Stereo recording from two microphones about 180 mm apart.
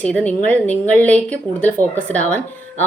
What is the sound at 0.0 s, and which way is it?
Speech, 10° left (ahead or behind).